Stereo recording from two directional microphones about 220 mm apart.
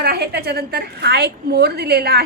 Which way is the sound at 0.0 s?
45° right (ahead or behind).